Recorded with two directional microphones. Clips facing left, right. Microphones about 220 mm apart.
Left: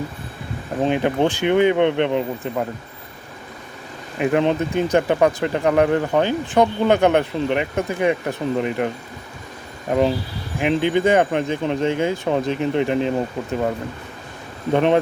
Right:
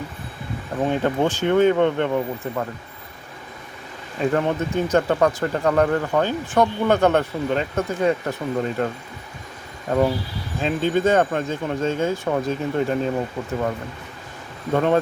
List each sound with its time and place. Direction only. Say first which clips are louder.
0.8 s speech: left 2 dB; 15° left (ahead or behind)
4.2 s speech: left 3 dB; 15° left (ahead or behind)
9.9 s speech: left 1 dB; 20° left (ahead or behind)
14.7 s speech: left 2 dB; 20° left (ahead or behind)